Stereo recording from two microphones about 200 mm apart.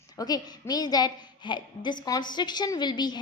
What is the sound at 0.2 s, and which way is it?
A woman's voice, 20° left (ahead or behind).